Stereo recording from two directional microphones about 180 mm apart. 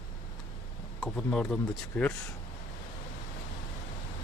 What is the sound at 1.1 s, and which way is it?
Speech, 5° left (ahead or behind).